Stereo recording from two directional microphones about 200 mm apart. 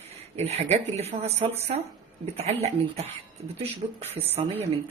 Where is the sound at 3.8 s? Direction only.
30° right (ahead or behind).